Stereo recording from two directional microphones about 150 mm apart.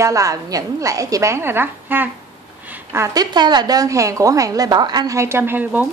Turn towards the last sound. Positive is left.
turn(degrees=-10)  # may be behind; listen again after turning